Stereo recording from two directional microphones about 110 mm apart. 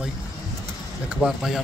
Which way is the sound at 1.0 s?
5° right (ahead or behind).